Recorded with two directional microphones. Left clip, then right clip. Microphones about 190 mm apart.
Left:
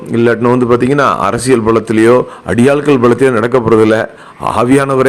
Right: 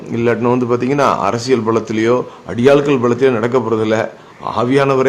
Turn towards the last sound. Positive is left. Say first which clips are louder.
# left 3 dB
turn(degrees=30)  # may be behind; listen again after turning